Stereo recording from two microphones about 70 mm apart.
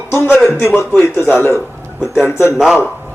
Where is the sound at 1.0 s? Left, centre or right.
Left.